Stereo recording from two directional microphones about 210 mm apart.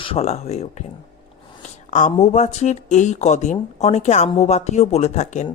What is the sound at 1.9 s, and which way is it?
Speech, 35° left (ahead or behind).